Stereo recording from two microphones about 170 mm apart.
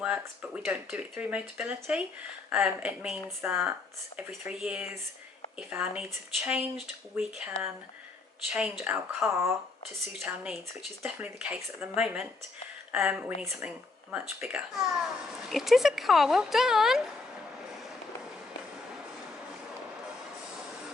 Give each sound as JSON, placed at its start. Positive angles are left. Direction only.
{"t": 0.0, "sound": "speech", "side_deg": -10}